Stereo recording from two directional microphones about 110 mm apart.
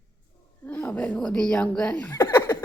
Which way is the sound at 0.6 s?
15° left (ahead or behind).